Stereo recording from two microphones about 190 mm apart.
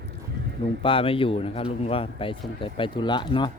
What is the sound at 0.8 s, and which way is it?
Speech, 30° left (ahead or behind).